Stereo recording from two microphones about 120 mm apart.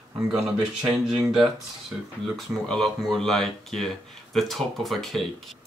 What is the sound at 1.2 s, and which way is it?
Speech, centre (ahead or behind).